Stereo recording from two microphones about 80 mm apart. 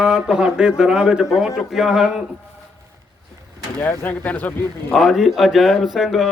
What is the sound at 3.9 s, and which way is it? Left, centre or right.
Speech, left.